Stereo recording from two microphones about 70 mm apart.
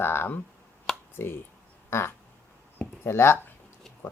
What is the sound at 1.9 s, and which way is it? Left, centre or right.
Speech, left.